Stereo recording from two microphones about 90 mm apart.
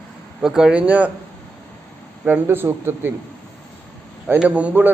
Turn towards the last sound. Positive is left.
turn(degrees=-20)  # may be behind; listen again after turning